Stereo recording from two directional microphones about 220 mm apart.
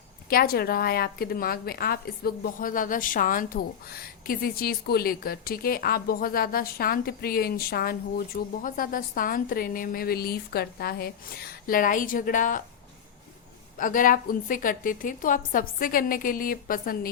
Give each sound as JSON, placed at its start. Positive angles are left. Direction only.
{"t": 0.3, "sound": "a woman's voice", "side_deg": 40}
{"t": 13.7, "sound": "a woman's voice", "side_deg": 40}